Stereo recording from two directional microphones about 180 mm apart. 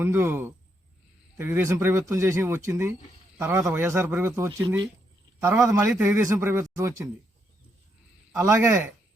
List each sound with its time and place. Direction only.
0.0 s speech: 15° right (ahead or behind)
8.3 s speech: 15° right (ahead or behind)